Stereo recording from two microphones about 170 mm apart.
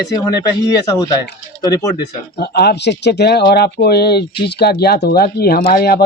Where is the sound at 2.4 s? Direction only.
70° left (ahead or behind).